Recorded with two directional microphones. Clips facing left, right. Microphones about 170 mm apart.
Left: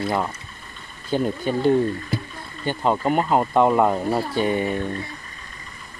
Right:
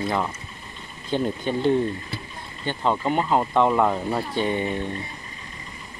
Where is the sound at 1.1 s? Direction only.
5° left (ahead or behind).